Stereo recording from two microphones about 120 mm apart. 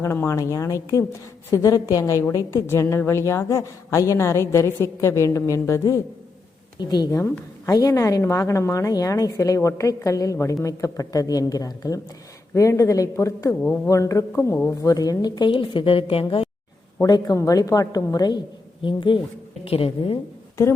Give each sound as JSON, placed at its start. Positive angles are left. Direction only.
{"t": 0.0, "sound": "a woman's voice", "side_deg": 25}
{"t": 6.7, "sound": "a woman's voice", "side_deg": 35}
{"t": 17.1, "sound": "a woman's voice", "side_deg": 35}